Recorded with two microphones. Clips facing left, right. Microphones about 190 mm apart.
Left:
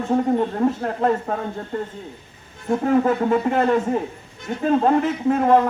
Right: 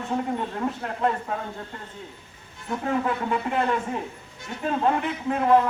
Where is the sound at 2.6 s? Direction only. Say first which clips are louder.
Left 8 dB; 40° left (ahead or behind).